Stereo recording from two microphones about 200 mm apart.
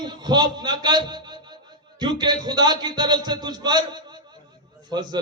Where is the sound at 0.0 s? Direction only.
20° right (ahead or behind).